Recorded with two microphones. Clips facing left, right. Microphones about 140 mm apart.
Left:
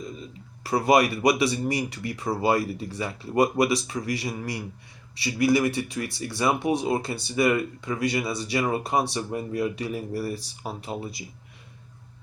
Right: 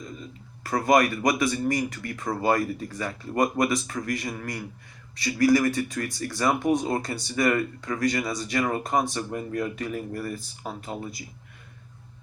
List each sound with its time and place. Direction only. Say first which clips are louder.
0.6 s speech: left 1 dB; 10° left (ahead or behind)
5.4 s speech: right 1 dB; 25° left (ahead or behind)
6.1 s speech: even; 10° left (ahead or behind)